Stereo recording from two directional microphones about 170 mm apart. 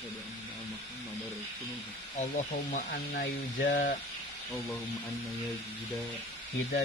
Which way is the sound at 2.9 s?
60° left (ahead or behind).